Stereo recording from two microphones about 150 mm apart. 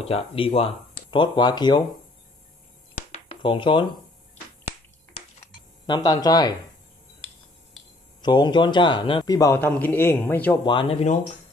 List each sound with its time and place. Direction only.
0.0 s speech: 40° left (ahead or behind)
3.1 s a sound: 35° left (ahead or behind)
5.9 s speech: 25° left (ahead or behind)
8.2 s speech: 30° left (ahead or behind); by 10.6 s 10° left (ahead or behind)
10.6 s speech: 35° left (ahead or behind)